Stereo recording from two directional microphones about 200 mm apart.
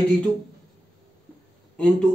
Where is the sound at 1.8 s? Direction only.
5° left (ahead or behind).